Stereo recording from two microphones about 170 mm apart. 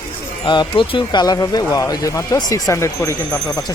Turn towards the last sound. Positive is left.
turn(degrees=15)  # may be behind; listen again after turning